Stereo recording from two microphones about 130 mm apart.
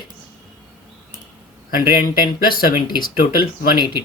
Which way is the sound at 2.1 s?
90° left.